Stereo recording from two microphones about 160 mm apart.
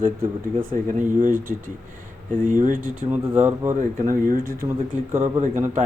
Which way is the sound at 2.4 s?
55° right (ahead or behind).